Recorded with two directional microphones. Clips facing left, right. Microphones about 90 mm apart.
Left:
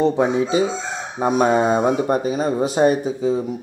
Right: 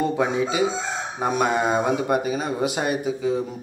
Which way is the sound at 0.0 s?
30° left (ahead or behind).